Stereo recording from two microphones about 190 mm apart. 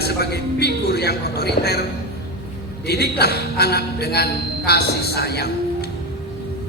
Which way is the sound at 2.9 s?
55° left (ahead or behind).